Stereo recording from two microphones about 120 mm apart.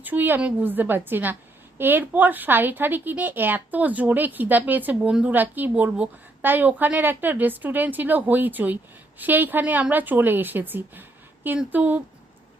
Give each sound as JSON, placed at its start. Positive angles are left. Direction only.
{"t": 0.0, "sound": "speech", "side_deg": -15}